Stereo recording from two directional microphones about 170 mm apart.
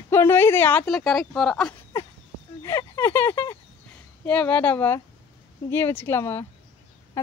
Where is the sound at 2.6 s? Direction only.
15° left (ahead or behind).